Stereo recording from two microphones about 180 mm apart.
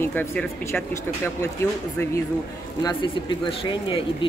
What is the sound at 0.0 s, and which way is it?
Speech, 10° left (ahead or behind).